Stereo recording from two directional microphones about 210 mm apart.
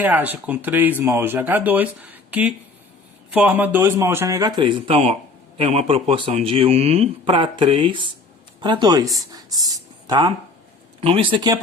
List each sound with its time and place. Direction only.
0.0 s speech: 10° right (ahead or behind)